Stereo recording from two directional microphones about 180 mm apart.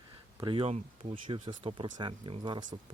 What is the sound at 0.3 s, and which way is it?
Speech, 25° right (ahead or behind).